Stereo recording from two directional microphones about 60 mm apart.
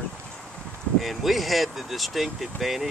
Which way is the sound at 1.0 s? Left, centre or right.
Centre.